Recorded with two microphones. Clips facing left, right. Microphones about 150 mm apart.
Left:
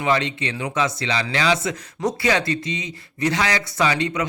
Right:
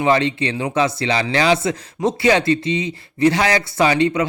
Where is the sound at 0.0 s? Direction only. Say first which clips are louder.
Right 5 dB; 30° right (ahead or behind).